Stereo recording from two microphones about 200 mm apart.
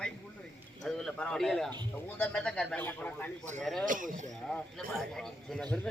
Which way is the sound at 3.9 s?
40° right (ahead or behind).